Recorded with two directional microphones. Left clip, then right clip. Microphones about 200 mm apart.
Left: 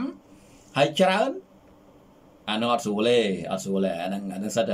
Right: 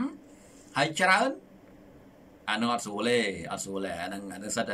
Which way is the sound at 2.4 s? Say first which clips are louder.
Left 4 dB; 10° left (ahead or behind).